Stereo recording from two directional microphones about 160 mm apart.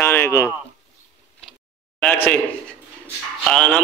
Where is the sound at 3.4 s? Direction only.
5° left (ahead or behind).